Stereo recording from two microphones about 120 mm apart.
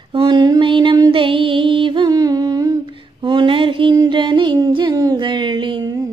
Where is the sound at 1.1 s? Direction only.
45° right (ahead or behind); by 2.7 s 30° right (ahead or behind).